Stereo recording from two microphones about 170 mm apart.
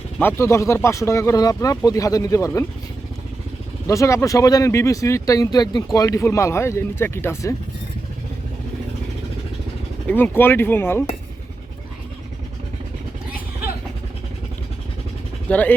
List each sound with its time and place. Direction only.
0.2 s speech: 15° left (ahead or behind)
3.8 s speech: 20° left (ahead or behind)
10.1 s speech: 10° left (ahead or behind)
15.4 s speech: 10° left (ahead or behind)